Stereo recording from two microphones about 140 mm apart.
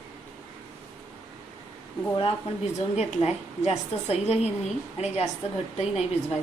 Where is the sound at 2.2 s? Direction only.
50° left (ahead or behind).